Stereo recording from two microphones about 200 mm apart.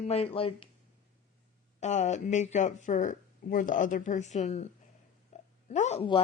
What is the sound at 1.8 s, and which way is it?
Speech, 35° left (ahead or behind).